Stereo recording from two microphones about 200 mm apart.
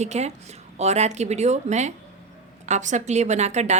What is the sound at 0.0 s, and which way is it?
A woman's voice, 35° right (ahead or behind).